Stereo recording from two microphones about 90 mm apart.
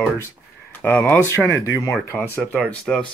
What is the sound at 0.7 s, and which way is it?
Speech, 20° left (ahead or behind).